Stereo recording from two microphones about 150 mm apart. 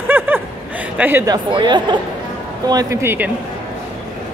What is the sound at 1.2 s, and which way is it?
Speech, 30° right (ahead or behind).